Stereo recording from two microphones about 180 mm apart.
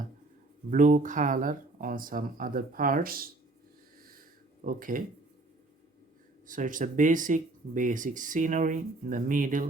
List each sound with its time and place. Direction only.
0.7 s speech: 45° right (ahead or behind)
4.6 s speech: 50° right (ahead or behind)
6.5 s speech: 45° right (ahead or behind)